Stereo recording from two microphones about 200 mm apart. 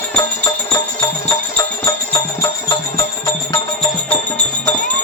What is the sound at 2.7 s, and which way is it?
Music, 15° left (ahead or behind).